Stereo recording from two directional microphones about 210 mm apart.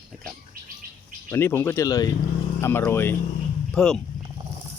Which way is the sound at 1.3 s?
10° left (ahead or behind).